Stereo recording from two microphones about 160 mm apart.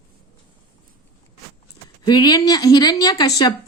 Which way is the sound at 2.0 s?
25° left (ahead or behind).